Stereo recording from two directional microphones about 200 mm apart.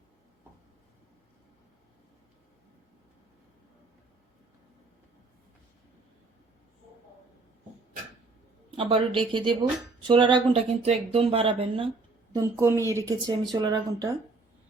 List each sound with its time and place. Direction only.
8.7 s speech: 25° right (ahead or behind)
12.3 s a woman's voice: 15° right (ahead or behind)